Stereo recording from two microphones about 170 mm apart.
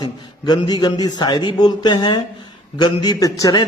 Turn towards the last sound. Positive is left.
turn(degrees=25)  # may be behind; listen again after turning